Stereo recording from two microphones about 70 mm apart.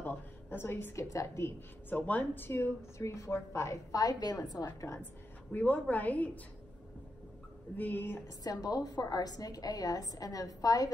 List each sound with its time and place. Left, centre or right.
0.0 s a sound: left
0.9 s a woman's voice: left
2.0 s a woman's voice: left
4.0 s a woman's voice: left
5.5 s a woman's voice: left
7.7 s a woman's voice: left
8.5 s a woman's voice: left